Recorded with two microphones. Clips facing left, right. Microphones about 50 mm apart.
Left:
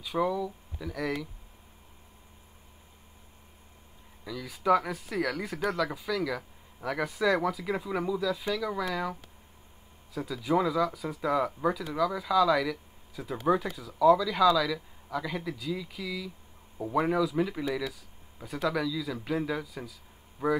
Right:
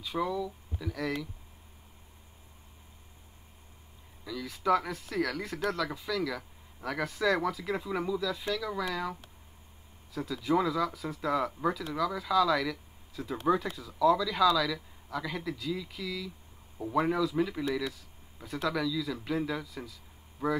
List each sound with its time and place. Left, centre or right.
0.0 s speech: centre
0.3 s speech: centre
0.8 s speech: centre
4.2 s speech: centre